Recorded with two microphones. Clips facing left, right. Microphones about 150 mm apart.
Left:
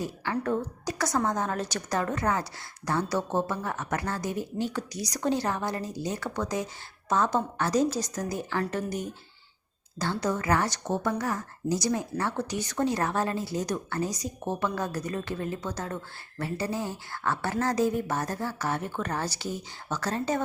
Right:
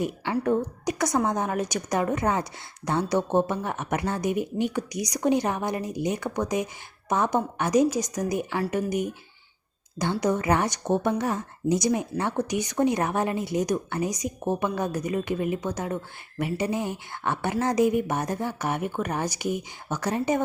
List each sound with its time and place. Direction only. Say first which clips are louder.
0.0 s speech: right 4 dB; 15° right (ahead or behind)